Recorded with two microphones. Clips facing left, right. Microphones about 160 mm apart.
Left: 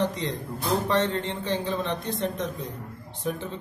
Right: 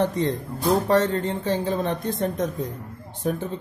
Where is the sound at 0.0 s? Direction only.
50° right (ahead or behind).